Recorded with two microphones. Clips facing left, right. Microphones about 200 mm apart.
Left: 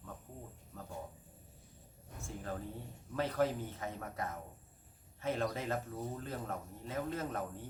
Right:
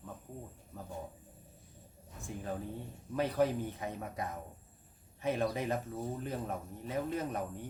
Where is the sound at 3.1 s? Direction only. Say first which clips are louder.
Right 3 dB; 15° right (ahead or behind).